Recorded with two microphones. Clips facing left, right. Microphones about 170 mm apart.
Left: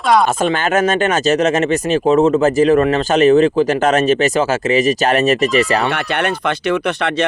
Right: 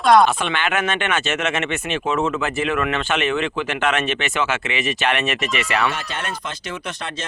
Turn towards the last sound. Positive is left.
turn(degrees=65)  # may be behind; listen again after turning